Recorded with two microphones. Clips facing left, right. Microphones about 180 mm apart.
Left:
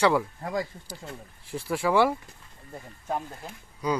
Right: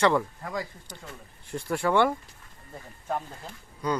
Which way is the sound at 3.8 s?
10° left (ahead or behind).